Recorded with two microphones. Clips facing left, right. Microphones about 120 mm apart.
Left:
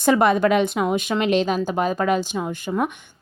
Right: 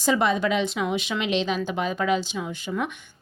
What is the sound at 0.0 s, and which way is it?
A woman's voice, 55° left (ahead or behind).